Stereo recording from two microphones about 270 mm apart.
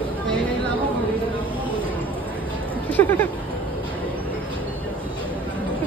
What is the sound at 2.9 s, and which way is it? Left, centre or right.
Speech, centre.